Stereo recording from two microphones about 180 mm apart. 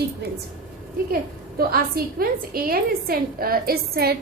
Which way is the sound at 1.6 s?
55° right (ahead or behind).